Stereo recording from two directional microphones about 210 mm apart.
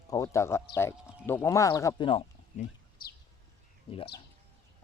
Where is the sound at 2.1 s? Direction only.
25° left (ahead or behind).